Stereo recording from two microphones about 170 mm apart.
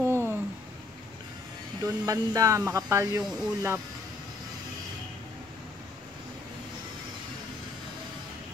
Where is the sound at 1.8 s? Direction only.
20° right (ahead or behind).